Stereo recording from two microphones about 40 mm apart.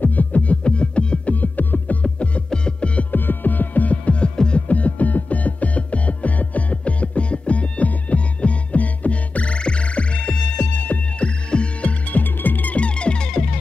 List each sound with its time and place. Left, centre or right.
0.0 s music: left
1.3 s music: left
2.5 s music: left
3.1 s music: left
4.6 s music: left
10.6 s music: left
11.1 s music: left
12.1 s music: left
12.7 s music: left